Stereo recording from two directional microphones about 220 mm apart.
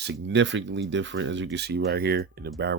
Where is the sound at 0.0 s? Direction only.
55° right (ahead or behind).